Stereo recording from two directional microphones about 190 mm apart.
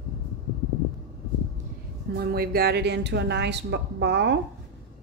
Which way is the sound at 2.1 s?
55° right (ahead or behind).